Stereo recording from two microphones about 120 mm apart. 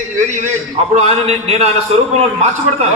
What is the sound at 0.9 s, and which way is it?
Speech, 55° right (ahead or behind).